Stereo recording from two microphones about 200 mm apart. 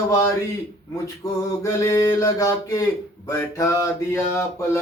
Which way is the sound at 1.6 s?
20° left (ahead or behind).